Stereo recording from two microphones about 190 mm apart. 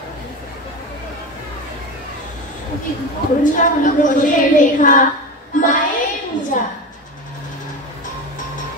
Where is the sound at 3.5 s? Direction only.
45° left (ahead or behind).